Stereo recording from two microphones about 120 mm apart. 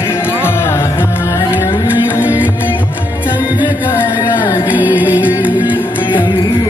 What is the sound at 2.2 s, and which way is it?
Music, 15° right (ahead or behind).